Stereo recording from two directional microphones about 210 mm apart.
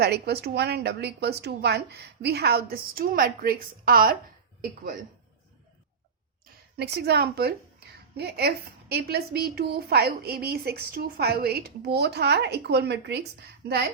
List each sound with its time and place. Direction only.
0.0 s a woman's voice: 50° right (ahead or behind)
6.7 s a woman's voice: 50° right (ahead or behind)